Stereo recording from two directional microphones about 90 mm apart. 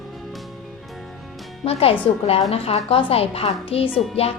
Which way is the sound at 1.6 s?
90° left.